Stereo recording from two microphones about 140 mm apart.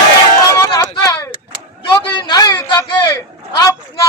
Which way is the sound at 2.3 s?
25° left (ahead or behind).